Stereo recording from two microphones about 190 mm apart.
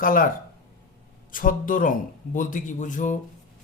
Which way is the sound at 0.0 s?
45° left (ahead or behind).